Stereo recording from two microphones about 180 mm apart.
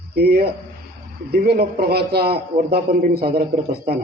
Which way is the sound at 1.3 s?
60° right (ahead or behind).